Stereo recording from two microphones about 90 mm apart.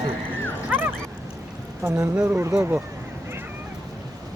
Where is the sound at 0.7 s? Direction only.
25° right (ahead or behind).